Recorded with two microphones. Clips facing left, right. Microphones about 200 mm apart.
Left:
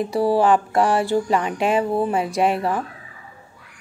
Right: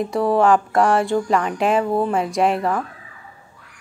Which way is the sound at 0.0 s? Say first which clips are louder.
Right 1 dB; 5° left (ahead or behind).